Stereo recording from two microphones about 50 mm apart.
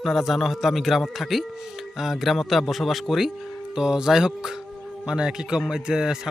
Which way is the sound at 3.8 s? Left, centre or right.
Centre.